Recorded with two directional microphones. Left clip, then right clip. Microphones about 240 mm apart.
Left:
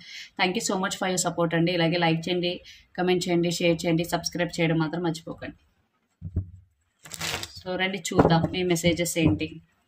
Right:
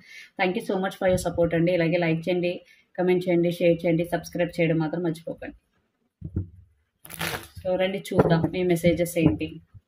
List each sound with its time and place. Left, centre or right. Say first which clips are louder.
0.1 s speech: even; left
7.6 s speech: right 4 dB; left